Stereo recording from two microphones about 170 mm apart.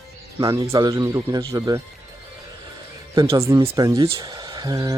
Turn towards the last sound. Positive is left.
turn(degrees=-20)  # may be behind; listen again after turning